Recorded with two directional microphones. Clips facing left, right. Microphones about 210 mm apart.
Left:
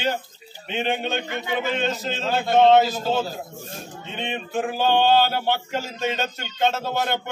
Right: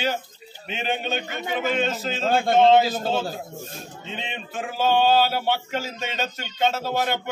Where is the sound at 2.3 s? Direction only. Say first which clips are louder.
Even; 50° right (ahead or behind).